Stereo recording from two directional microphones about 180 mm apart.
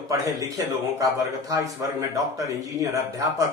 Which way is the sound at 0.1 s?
20° right (ahead or behind).